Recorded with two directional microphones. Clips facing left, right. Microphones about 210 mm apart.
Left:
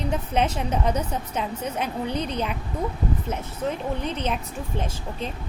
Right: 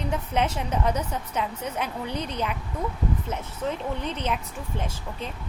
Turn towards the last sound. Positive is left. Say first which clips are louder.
# left 2 dB
turn(degrees=15)  # may be behind; listen again after turning